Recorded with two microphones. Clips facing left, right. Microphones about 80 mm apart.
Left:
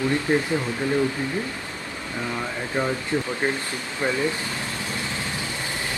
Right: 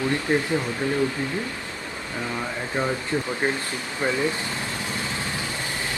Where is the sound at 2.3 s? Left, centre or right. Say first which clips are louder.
Left 1 dB; centre.